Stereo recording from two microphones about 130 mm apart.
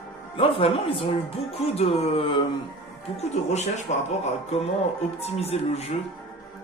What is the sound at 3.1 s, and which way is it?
Speech, 60° left (ahead or behind).